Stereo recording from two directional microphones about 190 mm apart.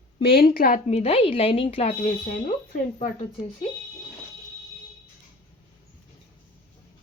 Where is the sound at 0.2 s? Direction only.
55° left (ahead or behind).